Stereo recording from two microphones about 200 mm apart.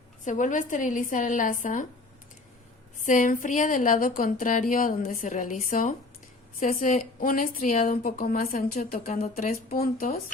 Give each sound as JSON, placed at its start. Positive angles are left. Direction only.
{"t": 0.3, "sound": "speech", "side_deg": 40}
{"t": 3.0, "sound": "a woman's voice", "side_deg": 40}
{"t": 9.1, "sound": "speech", "side_deg": 35}